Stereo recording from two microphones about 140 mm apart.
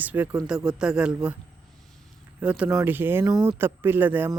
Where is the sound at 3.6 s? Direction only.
15° right (ahead or behind).